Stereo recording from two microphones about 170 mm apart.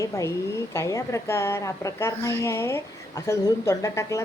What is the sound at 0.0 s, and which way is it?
A woman's voice, 15° left (ahead or behind).